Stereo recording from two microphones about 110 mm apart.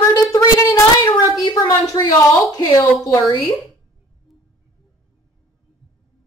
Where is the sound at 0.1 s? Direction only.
35° left (ahead or behind).